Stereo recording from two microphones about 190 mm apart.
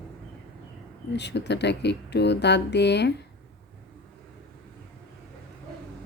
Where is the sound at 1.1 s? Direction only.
65° left (ahead or behind).